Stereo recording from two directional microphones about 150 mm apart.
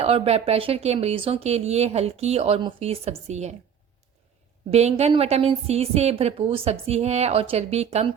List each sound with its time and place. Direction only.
0.0 s speech: 40° right (ahead or behind)
4.7 s speech: 45° right (ahead or behind)